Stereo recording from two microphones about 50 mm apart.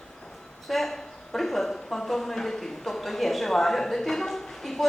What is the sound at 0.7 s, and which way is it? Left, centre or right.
A woman's voice, centre.